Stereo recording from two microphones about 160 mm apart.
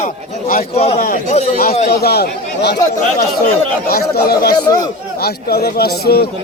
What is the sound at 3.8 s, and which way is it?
Speech, 75° left (ahead or behind).